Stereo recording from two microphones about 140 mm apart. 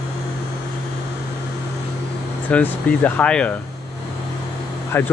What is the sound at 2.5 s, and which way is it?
Speech, 10° left (ahead or behind).